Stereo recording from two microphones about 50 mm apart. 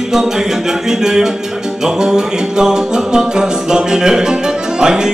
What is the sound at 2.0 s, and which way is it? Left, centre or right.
Music, centre.